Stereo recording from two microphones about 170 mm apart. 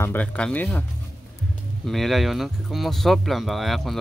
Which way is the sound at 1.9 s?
Centre (ahead or behind).